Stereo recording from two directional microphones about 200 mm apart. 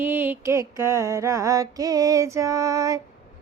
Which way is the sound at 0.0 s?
10° right (ahead or behind).